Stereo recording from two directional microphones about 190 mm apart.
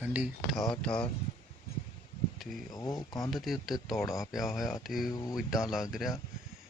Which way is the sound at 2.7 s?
20° left (ahead or behind).